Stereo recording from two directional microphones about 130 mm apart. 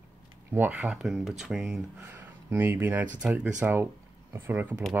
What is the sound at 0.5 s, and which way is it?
Speech, 10° right (ahead or behind).